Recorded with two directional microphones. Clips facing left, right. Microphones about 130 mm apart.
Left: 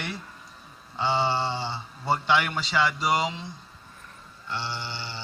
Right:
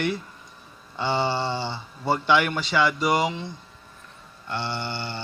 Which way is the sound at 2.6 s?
55° right (ahead or behind).